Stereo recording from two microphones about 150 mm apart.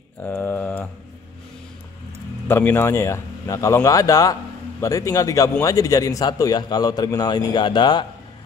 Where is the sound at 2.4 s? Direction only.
15° left (ahead or behind).